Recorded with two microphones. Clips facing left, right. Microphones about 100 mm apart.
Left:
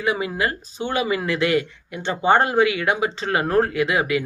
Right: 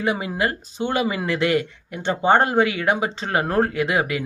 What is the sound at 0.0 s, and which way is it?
Speech, 40° right (ahead or behind).